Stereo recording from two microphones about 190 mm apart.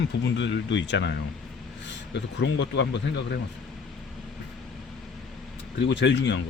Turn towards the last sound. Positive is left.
turn(degrees=70)  # may be behind; listen again after turning